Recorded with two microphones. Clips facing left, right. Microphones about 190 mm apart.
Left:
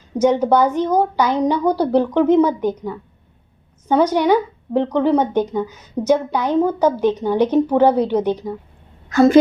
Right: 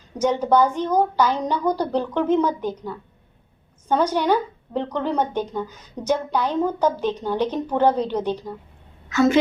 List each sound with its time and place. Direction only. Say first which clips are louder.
0.2 s a woman's voice: left 4 dB; 10° left (ahead or behind)
4.1 s a woman's voice: left 5 dB; 10° left (ahead or behind)
9.0 s a woman's voice: left 6 dB; 35° left (ahead or behind)